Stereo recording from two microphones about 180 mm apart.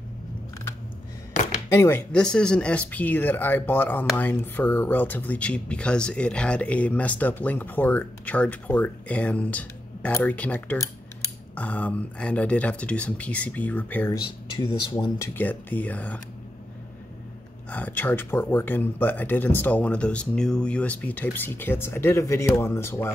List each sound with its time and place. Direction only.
1.7 s speech: 15° left (ahead or behind)
14.1 s speech: 20° left (ahead or behind)
17.6 s speech: 10° left (ahead or behind)